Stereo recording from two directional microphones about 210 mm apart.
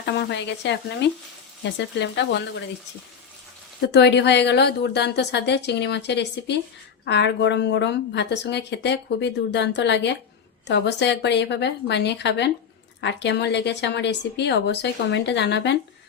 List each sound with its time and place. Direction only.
0.0 s speech: 55° left (ahead or behind)
3.8 s speech: 55° left (ahead or behind)